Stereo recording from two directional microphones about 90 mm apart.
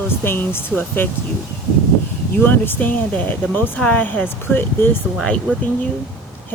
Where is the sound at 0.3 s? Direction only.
25° left (ahead or behind).